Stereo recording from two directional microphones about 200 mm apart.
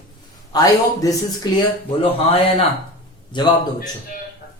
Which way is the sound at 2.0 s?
30° left (ahead or behind).